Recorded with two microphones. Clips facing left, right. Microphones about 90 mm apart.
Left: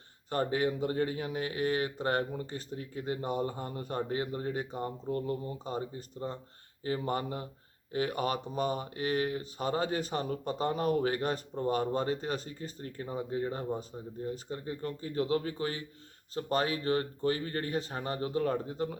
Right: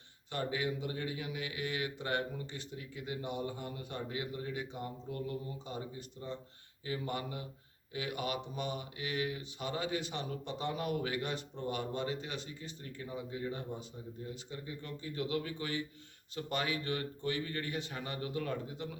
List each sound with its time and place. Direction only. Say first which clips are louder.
0.3 s speech: left 6 dB; 40° left (ahead or behind)